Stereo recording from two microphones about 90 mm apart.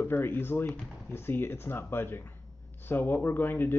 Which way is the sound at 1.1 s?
25° left (ahead or behind).